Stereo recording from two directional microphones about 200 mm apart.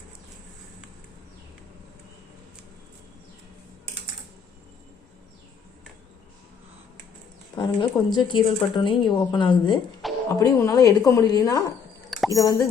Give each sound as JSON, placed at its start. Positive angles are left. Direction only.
{"t": 7.5, "sound": "speech", "side_deg": 20}
{"t": 10.0, "sound": "music", "side_deg": 0}
{"t": 10.4, "sound": "a woman's voice", "side_deg": 15}